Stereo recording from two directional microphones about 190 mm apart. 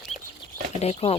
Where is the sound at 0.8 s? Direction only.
35° left (ahead or behind).